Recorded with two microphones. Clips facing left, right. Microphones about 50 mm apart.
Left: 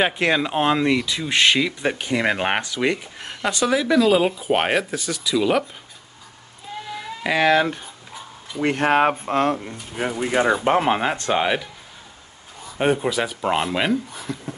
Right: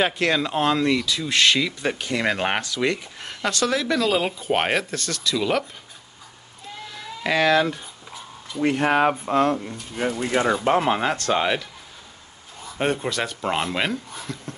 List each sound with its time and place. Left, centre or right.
0.0 s speech: centre
6.9 s cat: centre
8.7 s speech: left
9.2 s speech: left
10.0 s speech: left
12.7 s speech: centre